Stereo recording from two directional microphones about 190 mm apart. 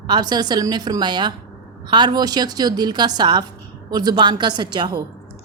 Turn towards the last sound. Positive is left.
turn(degrees=-25)  # may be behind; listen again after turning